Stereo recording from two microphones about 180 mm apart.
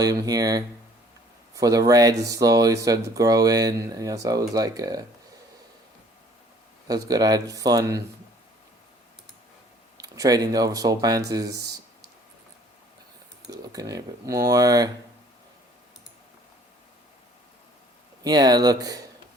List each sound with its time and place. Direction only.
0.0 s speech: 20° right (ahead or behind)
6.8 s speech: 20° right (ahead or behind)
10.0 s speech: 20° right (ahead or behind)
13.5 s speech: 20° right (ahead or behind)
18.2 s speech: 20° right (ahead or behind)